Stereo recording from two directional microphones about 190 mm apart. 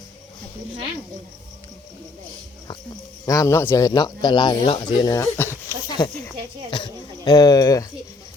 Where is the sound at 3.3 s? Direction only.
15° left (ahead or behind).